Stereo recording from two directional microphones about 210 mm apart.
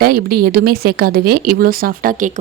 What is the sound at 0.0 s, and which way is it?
Speech, 45° right (ahead or behind).